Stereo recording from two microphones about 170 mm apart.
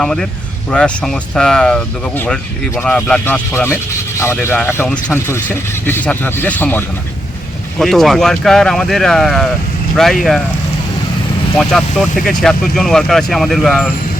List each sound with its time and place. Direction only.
0.0 s speech: 5° left (ahead or behind)
11.5 s speech: 5° left (ahead or behind)